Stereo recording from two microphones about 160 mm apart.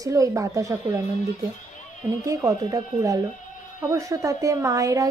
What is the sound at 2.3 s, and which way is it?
Speech, 20° right (ahead or behind).